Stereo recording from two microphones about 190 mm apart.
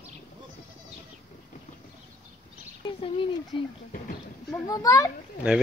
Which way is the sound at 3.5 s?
30° left (ahead or behind).